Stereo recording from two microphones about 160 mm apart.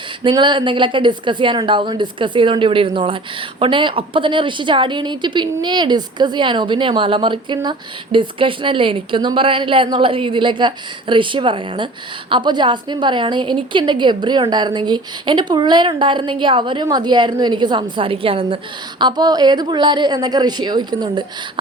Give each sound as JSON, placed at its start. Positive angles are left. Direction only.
{"t": 0.2, "sound": "a woman's voice", "side_deg": -30}